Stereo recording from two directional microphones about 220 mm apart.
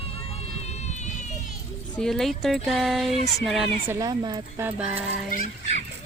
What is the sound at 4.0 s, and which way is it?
Speech, 15° right (ahead or behind).